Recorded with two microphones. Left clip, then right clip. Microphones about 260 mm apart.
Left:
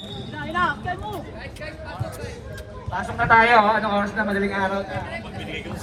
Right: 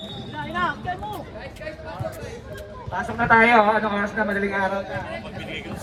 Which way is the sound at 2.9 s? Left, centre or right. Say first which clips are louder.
Left 1 dB; left.